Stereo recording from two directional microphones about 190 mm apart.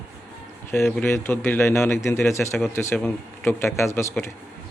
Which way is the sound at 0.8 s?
10° left (ahead or behind).